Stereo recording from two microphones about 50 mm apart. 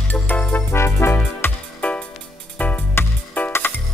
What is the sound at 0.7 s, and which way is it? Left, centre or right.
Music, left.